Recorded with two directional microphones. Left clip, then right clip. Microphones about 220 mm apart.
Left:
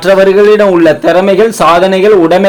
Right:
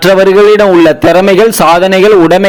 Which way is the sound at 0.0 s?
30° right (ahead or behind).